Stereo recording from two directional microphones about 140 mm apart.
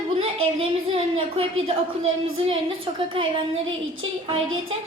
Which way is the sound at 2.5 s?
40° right (ahead or behind).